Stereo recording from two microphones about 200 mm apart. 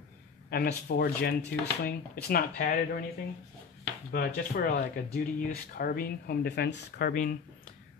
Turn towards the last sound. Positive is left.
turn(degrees=45)  # may be behind; listen again after turning